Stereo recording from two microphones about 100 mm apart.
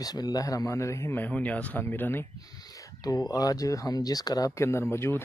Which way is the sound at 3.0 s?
40° left (ahead or behind).